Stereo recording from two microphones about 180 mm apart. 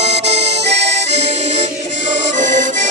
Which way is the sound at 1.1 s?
40° right (ahead or behind).